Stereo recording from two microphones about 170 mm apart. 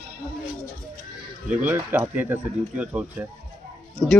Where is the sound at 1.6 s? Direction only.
10° right (ahead or behind).